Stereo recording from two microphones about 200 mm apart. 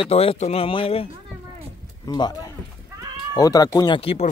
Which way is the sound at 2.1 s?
20° left (ahead or behind).